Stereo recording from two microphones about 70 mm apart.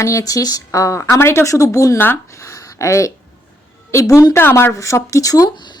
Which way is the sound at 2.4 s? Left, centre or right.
Left.